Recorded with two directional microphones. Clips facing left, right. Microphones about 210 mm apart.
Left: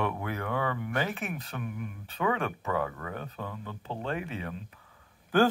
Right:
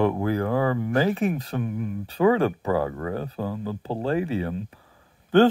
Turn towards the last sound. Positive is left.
turn(degrees=-30)  # may be behind; listen again after turning